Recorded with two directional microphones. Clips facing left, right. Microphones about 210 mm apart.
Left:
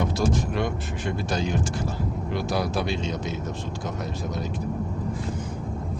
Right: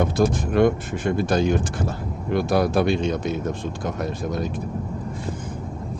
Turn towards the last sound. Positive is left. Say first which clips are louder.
# right 4 dB
turn(degrees=-55)  # may be behind; listen again after turning